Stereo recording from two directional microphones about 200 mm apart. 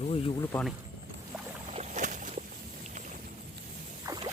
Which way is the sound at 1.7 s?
35° right (ahead or behind).